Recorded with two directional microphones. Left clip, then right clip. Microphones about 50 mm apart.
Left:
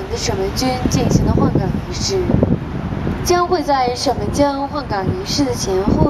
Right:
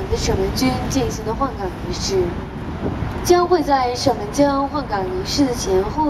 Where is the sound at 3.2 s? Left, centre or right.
Left.